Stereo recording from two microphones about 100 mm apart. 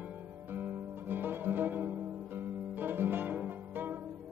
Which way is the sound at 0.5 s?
20° right (ahead or behind).